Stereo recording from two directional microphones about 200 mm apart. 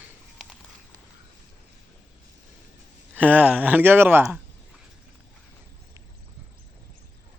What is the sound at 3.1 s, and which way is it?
Speech, 10° right (ahead or behind).